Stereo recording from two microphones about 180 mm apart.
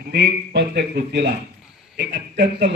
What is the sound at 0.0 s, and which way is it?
A man's voice, 65° right (ahead or behind).